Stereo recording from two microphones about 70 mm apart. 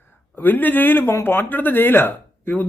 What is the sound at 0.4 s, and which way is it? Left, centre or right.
Speech, left.